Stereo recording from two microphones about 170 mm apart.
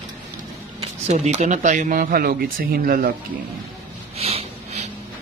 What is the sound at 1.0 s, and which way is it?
Speech, 40° right (ahead or behind).